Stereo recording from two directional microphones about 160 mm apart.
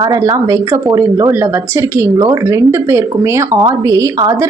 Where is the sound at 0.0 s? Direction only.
20° right (ahead or behind).